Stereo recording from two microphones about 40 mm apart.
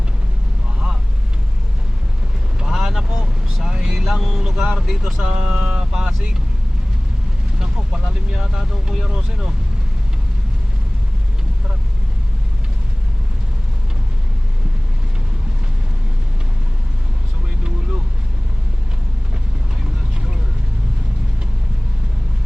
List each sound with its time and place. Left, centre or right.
2.6 s vehicle: centre
4.0 s vehicle: centre
4.7 s speech: centre
5.2 s speech: right
5.5 s a sound: right
5.9 s vehicle: centre
7.6 s speech: centre